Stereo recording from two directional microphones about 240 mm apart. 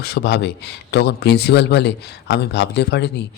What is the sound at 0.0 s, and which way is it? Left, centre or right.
Speech, left.